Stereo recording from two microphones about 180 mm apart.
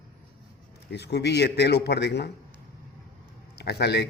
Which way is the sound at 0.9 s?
70° left (ahead or behind).